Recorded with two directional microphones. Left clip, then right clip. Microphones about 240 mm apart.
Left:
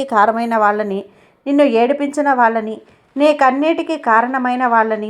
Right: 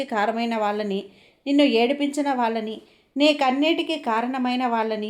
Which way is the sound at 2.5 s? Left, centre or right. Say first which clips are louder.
Left 8 dB; left.